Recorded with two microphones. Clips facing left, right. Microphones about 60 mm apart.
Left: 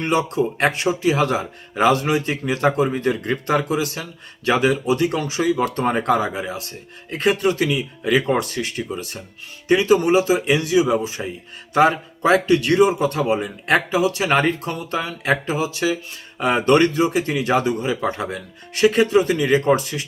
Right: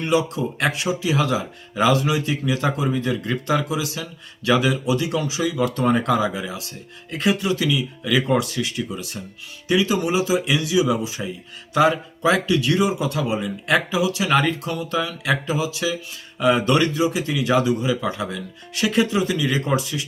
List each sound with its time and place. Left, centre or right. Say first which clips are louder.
0.0 s a man's voice: left 1 dB; left